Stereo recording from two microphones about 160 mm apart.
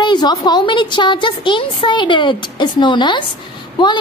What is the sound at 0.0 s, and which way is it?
A woman's voice, 25° left (ahead or behind).